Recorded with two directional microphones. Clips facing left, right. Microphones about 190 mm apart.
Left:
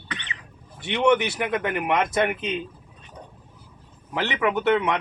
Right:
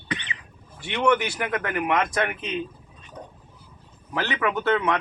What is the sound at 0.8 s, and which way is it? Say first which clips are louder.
Speech: left 2 dB; 20° left (ahead or behind).